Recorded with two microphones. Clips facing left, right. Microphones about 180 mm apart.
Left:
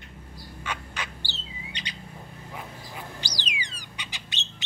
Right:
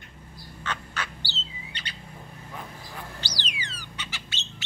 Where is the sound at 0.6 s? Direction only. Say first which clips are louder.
Right 1 dB; 15° left (ahead or behind).